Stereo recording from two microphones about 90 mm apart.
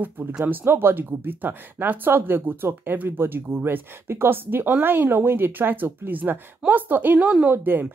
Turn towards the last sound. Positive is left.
turn(degrees=-20)  # may be behind; listen again after turning